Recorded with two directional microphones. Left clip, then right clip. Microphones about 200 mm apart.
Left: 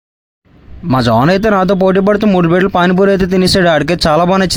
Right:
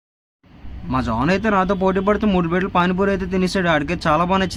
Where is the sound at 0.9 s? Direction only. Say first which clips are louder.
Left 10 dB; 40° left (ahead or behind).